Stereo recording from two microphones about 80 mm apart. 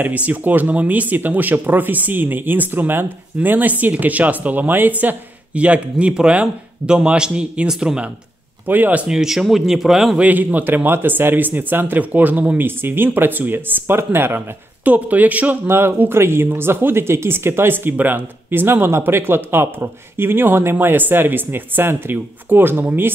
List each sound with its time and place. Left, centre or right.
0.0 s speech: centre
8.6 s speech: right
9.1 s speech: centre
10.2 s speech: right